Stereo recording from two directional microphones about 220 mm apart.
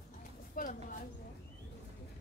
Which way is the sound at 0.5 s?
40° left (ahead or behind).